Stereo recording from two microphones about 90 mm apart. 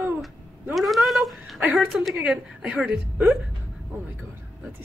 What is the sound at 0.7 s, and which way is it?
A woman's voice, centre (ahead or behind).